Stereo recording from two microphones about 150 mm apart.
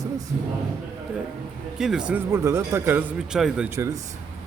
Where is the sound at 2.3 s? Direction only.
20° right (ahead or behind).